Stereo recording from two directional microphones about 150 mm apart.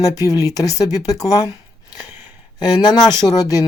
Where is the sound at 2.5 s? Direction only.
30° left (ahead or behind).